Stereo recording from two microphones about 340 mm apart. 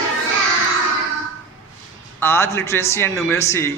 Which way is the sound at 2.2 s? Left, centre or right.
Centre.